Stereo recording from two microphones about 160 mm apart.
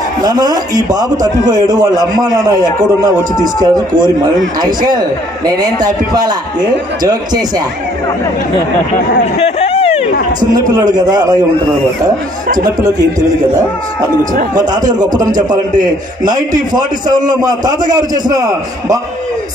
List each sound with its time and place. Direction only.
0.2 s a man's voice: 25° right (ahead or behind)
3.5 s a man's voice: 25° right (ahead or behind)
9.6 s a sound: 40° left (ahead or behind)
10.4 s a man's voice: 25° right (ahead or behind)
14.5 s a man's voice: 25° right (ahead or behind)